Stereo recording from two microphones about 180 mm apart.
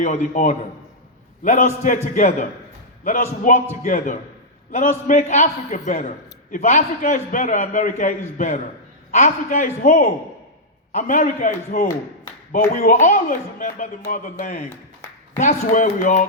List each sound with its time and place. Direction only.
0.0 s a man's voice: 35° left (ahead or behind)
1.5 s a man's voice: 40° left (ahead or behind)
9.1 s a man's voice: 40° left (ahead or behind)